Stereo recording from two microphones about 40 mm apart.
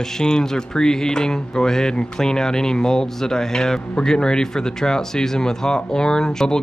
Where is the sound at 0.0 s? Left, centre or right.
Centre.